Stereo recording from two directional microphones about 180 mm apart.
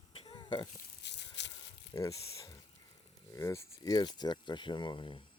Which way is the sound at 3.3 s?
15° left (ahead or behind).